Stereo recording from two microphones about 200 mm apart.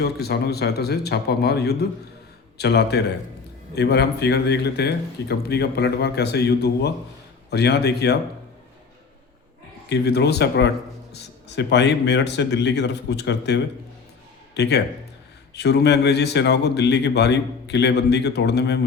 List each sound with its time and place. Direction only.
0.0 s a man's voice: 55° left (ahead or behind)
9.9 s a man's voice: 55° left (ahead or behind)